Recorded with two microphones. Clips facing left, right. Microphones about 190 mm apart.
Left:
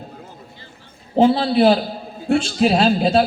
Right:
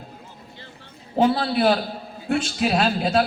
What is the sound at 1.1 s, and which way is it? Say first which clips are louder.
A man's voice: left 5 dB; 25° left (ahead or behind).